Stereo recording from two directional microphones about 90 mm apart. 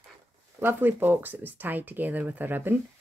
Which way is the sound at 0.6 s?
25° right (ahead or behind).